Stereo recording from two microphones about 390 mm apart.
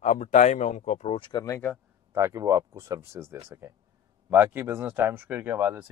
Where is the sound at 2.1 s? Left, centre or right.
Centre.